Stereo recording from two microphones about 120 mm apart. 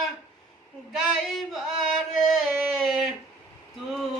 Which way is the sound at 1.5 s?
Centre (ahead or behind).